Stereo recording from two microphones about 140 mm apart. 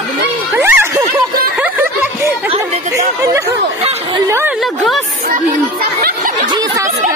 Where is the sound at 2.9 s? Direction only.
20° right (ahead or behind).